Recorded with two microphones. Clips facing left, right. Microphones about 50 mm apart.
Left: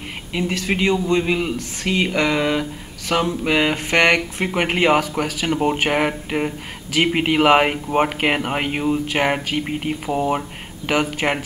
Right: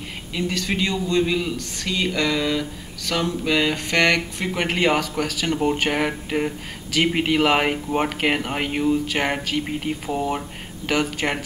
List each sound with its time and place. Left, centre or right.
0.3 s speech: centre